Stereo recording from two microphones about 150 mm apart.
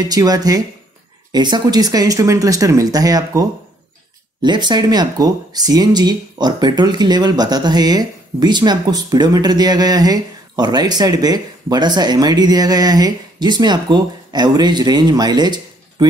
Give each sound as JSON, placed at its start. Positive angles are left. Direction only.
{"t": 0.1, "sound": "speech", "side_deg": -25}